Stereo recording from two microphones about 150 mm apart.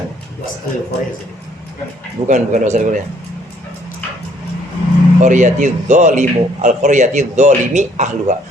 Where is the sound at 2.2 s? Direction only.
55° right (ahead or behind).